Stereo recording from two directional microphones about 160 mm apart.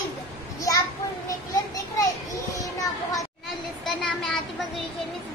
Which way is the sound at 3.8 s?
5° left (ahead or behind).